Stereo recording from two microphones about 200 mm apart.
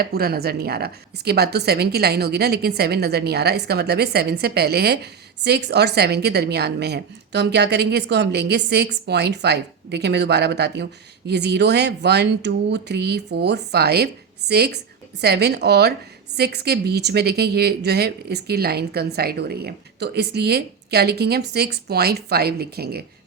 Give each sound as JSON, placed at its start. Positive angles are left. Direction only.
{"t": 0.0, "sound": "a woman's voice", "side_deg": -50}